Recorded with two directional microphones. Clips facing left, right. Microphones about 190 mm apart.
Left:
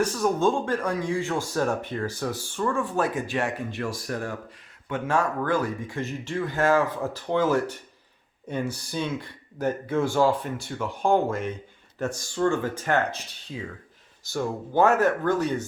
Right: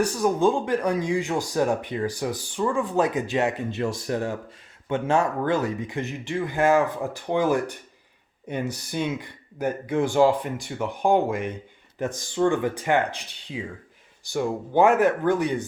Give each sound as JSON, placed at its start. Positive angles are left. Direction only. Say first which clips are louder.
{"t": 0.0, "sound": "speech", "louder": "right 2 dB", "side_deg": -15}